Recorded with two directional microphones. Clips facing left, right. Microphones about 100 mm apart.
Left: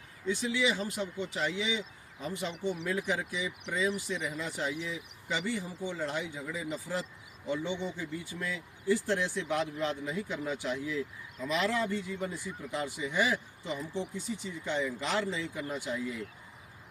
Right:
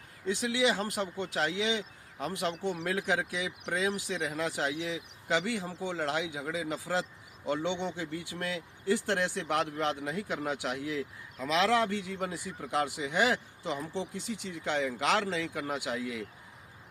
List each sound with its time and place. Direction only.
0.3 s speech: 75° right (ahead or behind)